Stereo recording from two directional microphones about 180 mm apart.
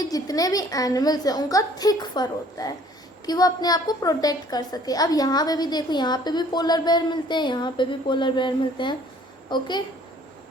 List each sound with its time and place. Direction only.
0.0 s a woman's voice: 20° left (ahead or behind)